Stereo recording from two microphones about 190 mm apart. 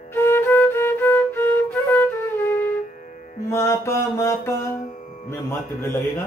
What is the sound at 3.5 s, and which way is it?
Mantra, 15° left (ahead or behind).